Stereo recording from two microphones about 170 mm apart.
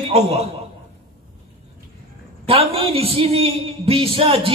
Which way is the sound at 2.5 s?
35° right (ahead or behind).